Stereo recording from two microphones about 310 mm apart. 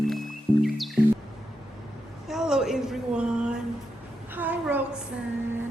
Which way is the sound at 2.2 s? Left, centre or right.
Centre.